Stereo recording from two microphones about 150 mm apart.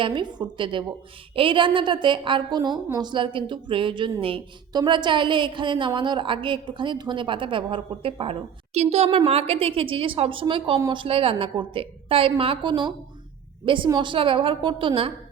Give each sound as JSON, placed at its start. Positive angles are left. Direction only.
{"t": 0.0, "sound": "a woman's voice", "side_deg": -30}